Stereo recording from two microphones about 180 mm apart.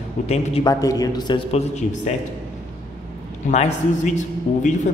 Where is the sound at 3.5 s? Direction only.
40° left (ahead or behind).